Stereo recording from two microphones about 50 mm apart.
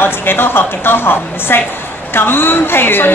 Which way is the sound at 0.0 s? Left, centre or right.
Left.